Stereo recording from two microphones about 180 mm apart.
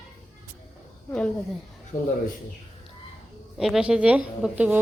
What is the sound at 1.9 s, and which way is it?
Speech, 50° left (ahead or behind).